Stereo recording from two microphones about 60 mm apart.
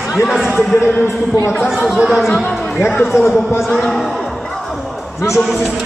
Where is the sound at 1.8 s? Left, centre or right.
Centre.